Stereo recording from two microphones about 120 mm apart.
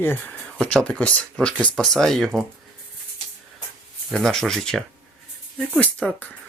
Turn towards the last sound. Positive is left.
turn(degrees=10)  # may be behind; listen again after turning